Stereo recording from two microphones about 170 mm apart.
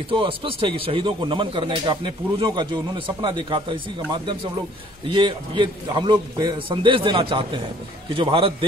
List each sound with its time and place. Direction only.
0.1 s a man's voice: 30° right (ahead or behind)